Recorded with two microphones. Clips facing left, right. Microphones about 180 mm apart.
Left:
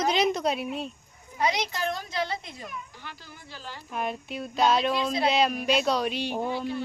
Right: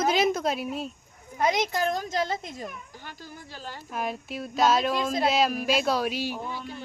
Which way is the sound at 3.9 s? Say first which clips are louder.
Even; centre (ahead or behind).